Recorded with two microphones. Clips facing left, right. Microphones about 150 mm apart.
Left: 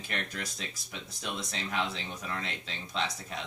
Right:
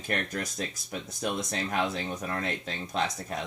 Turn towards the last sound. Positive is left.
turn(degrees=-50)  # may be behind; listen again after turning